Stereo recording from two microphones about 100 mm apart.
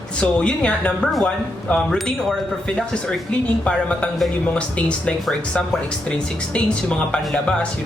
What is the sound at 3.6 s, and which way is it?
Speech, 10° left (ahead or behind).